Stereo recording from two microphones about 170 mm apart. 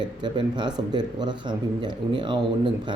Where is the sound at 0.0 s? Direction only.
25° right (ahead or behind).